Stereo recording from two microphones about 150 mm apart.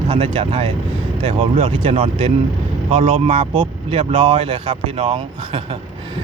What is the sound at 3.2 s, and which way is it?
Speech, 35° right (ahead or behind).